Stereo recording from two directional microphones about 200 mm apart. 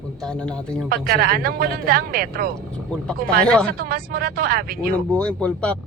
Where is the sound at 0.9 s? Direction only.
50° right (ahead or behind).